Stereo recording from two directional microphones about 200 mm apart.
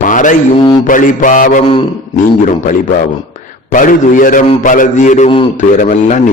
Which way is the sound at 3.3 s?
40° left (ahead or behind).